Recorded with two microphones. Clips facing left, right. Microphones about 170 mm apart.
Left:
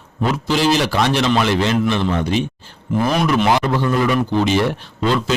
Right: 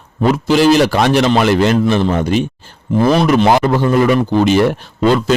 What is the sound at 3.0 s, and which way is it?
Speech, 35° right (ahead or behind).